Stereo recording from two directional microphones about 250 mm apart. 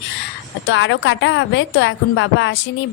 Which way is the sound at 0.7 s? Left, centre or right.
Left.